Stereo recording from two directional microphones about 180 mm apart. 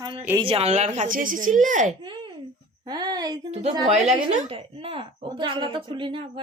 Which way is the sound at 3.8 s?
35° right (ahead or behind).